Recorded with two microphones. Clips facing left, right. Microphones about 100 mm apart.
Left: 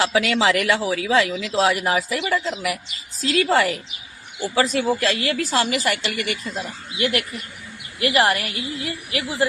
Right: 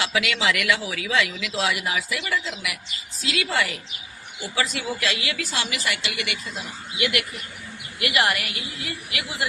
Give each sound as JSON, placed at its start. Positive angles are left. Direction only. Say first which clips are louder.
{"t": 0.0, "sound": "speech", "louder": "left 5 dB", "side_deg": 35}
{"t": 7.0, "sound": "speech", "louder": "left 3 dB", "side_deg": 35}